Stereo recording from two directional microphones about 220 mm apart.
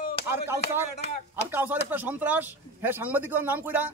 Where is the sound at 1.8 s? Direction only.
10° right (ahead or behind).